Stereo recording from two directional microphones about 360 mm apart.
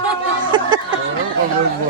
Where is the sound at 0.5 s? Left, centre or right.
Centre.